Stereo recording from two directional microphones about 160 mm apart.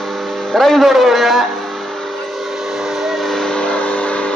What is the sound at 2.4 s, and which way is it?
Train, centre (ahead or behind).